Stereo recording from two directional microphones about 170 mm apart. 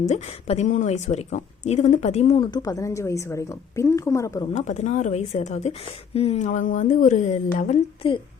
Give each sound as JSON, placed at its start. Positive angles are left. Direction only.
{"t": 0.1, "sound": "a woman's voice", "side_deg": 40}
{"t": 4.5, "sound": "speech", "side_deg": 45}
{"t": 8.0, "sound": "a woman's voice", "side_deg": 30}